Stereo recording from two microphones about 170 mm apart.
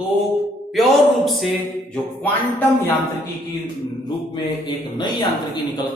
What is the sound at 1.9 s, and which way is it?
Music, 10° left (ahead or behind).